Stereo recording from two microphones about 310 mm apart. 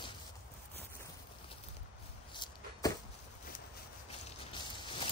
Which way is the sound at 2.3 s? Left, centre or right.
Centre.